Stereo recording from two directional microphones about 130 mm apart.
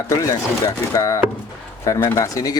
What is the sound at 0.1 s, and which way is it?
Speech, 25° left (ahead or behind).